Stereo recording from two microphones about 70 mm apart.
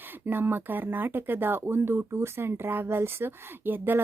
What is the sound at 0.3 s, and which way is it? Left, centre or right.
Speech, right.